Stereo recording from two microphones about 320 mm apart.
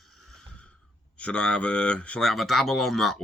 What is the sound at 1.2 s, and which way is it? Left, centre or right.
Speech, centre.